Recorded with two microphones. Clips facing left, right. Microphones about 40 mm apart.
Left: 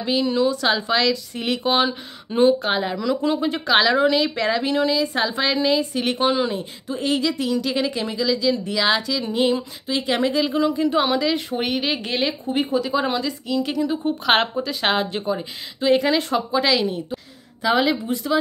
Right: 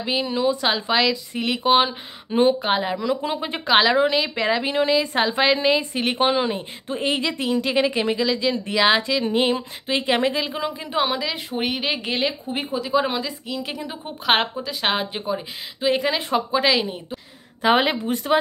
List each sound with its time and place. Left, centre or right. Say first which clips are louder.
0.0 s a woman's voice: left 2 dB; centre
3.6 s a woman's voice: right 1 dB; centre
9.2 s a sound: even; right
10.6 s a woman's voice: left 5 dB; right
16.2 s speech: even; centre
17.6 s a sound: right 1 dB; right